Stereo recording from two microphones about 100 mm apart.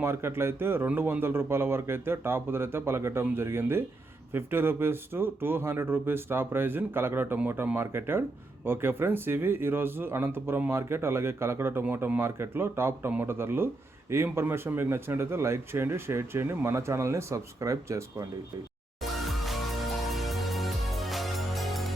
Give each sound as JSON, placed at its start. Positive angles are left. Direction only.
{"t": 0.0, "sound": "speech", "side_deg": -25}
{"t": 19.2, "sound": "music", "side_deg": 0}